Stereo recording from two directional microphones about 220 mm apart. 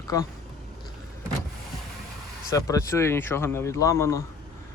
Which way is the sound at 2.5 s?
15° left (ahead or behind).